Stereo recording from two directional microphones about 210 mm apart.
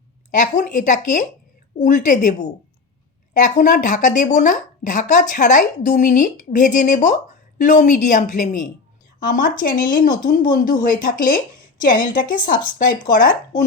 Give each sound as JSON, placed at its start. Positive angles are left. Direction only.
{"t": 0.3, "sound": "speech", "side_deg": 35}